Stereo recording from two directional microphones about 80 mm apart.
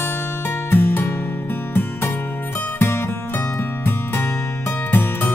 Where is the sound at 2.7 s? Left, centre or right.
Left.